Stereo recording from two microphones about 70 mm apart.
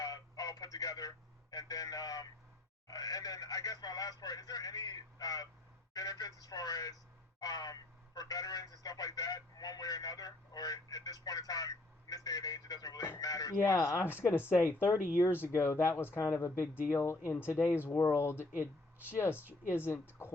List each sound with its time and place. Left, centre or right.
0.0 s telephone: left
2.8 s speech: left
14.3 s speech: left
14.9 s speech: right
15.2 s speech: left